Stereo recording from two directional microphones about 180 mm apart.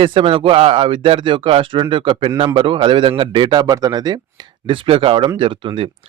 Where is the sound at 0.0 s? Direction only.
30° right (ahead or behind).